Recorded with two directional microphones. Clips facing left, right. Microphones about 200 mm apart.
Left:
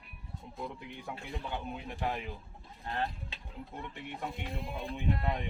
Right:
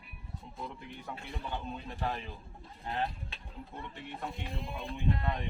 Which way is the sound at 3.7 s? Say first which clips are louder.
Left 1 dB; 15° left (ahead or behind).